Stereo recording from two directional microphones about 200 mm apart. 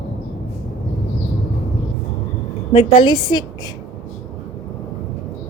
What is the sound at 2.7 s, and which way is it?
Speech, 25° left (ahead or behind).